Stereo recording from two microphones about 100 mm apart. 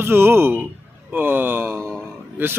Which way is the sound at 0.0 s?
25° right (ahead or behind).